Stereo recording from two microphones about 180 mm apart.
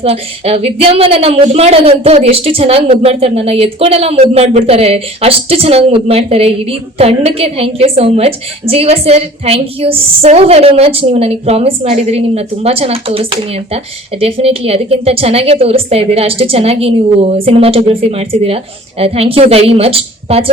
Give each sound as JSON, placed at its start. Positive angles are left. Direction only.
{"t": 0.0, "sound": "a woman's voice", "side_deg": -35}